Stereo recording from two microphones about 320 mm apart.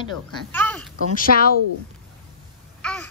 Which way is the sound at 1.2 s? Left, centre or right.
Left.